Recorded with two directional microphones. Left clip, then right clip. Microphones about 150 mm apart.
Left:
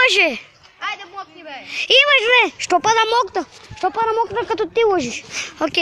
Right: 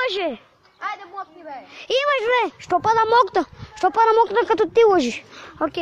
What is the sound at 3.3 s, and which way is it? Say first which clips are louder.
Speech: right 2 dB; 65° right (ahead or behind).